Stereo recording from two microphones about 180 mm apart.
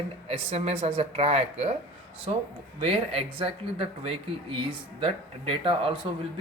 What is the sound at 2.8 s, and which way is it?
A woman's voice, 35° right (ahead or behind).